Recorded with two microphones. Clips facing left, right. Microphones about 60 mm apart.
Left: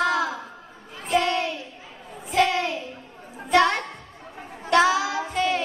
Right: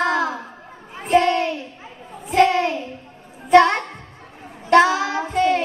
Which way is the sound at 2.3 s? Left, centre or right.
Right.